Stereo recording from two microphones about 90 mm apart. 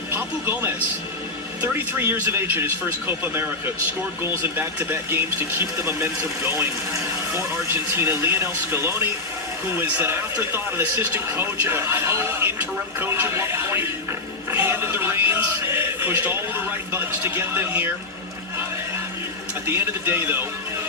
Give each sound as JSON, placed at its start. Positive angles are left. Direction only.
{"t": 0.1, "sound": "speech", "side_deg": -25}
{"t": 4.5, "sound": "speech", "side_deg": -20}
{"t": 19.6, "sound": "speech", "side_deg": -25}